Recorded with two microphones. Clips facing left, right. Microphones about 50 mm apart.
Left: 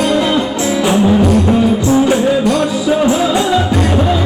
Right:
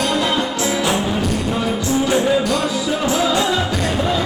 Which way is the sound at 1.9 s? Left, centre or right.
Left.